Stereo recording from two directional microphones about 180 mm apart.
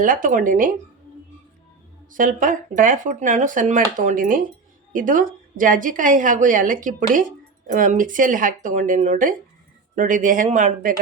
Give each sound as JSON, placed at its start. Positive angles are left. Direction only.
{"t": 0.0, "sound": "speech", "side_deg": -50}
{"t": 2.1, "sound": "speech", "side_deg": -45}